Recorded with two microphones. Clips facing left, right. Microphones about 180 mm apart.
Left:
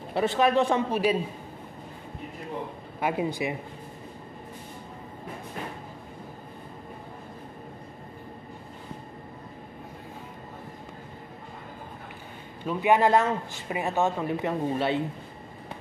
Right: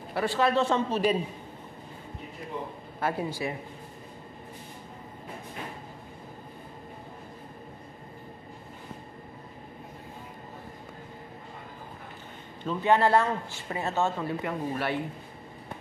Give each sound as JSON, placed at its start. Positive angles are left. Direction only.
{"t": 0.1, "sound": "a man's voice", "side_deg": 20}
{"t": 3.0, "sound": "speech", "side_deg": 15}
{"t": 12.6, "sound": "a man's voice", "side_deg": 15}